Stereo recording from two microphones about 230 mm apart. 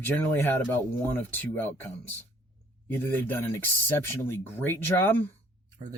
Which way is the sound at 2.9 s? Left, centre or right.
Centre.